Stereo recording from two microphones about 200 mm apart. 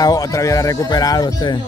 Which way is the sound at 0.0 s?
20° left (ahead or behind).